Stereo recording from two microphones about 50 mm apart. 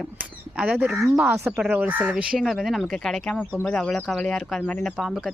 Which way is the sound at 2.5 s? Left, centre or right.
Centre.